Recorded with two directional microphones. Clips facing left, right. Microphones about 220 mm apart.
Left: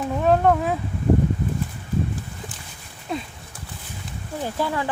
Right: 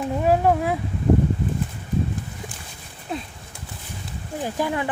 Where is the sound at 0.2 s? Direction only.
10° right (ahead or behind).